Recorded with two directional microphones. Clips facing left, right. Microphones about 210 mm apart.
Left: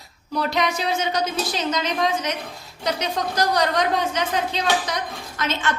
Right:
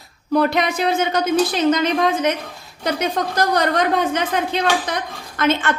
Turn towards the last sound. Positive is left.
turn(degrees=-55)  # may be behind; listen again after turning